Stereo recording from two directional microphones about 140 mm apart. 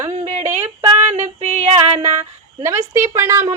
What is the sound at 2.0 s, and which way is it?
Speech, 15° right (ahead or behind).